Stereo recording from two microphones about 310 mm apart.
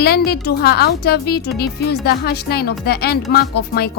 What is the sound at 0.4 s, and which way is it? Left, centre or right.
Speech, left.